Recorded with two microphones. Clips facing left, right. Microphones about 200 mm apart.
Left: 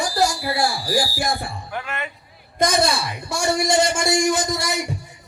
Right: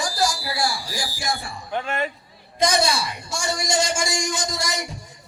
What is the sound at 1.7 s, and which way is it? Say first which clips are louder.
Speech: right 6 dB; 30° right (ahead or behind).